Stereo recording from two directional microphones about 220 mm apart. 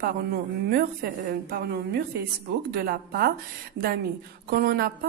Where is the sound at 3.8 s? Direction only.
80° right.